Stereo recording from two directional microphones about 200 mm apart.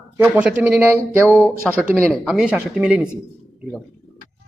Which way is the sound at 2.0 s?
5° left (ahead or behind).